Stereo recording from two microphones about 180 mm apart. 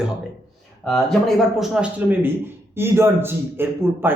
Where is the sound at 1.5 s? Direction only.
5° right (ahead or behind).